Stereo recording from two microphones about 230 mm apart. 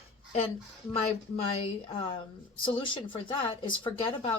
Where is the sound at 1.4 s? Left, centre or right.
Left.